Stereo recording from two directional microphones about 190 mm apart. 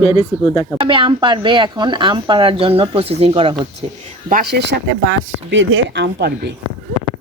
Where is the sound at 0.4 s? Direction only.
20° left (ahead or behind).